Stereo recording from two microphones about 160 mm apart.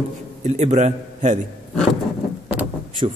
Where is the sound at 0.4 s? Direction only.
45° right (ahead or behind).